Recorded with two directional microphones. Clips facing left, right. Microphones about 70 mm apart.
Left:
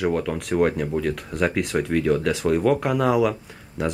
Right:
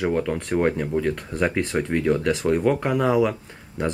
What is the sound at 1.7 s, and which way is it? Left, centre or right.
Speech, centre.